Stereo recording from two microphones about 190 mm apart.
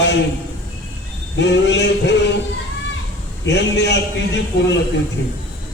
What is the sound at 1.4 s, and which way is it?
Speech, 65° left (ahead or behind).